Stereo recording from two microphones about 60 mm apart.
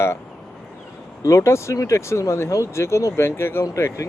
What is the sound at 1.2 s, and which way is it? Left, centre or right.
Speech, left.